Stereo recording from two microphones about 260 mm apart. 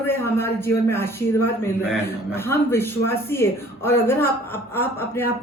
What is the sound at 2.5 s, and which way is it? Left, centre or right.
A woman's voice, centre.